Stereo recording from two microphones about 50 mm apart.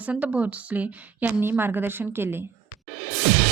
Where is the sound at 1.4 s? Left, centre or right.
Right.